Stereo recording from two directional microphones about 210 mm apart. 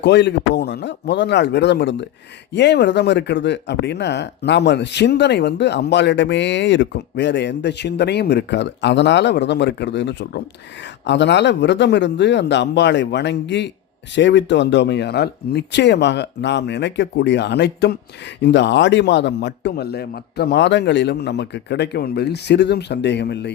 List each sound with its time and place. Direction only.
0.0 s speech: 55° left (ahead or behind)